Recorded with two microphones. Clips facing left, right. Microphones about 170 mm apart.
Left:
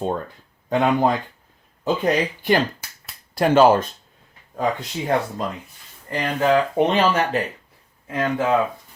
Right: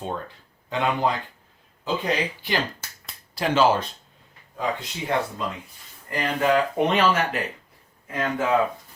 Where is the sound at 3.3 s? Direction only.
50° left (ahead or behind).